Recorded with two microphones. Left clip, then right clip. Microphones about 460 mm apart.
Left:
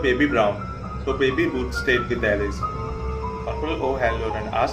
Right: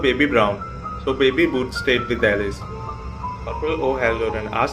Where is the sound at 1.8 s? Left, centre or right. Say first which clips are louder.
Right 2 dB; centre.